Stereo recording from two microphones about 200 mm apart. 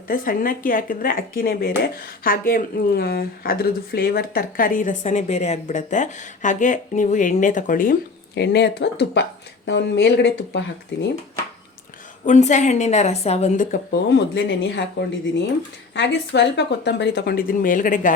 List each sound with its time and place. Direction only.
0.1 s speech: 45° left (ahead or behind)
8.4 s speech: 60° left (ahead or behind)
12.2 s a woman's voice: 35° left (ahead or behind)
14.1 s speech: 55° left (ahead or behind); by 18.1 s 40° left (ahead or behind)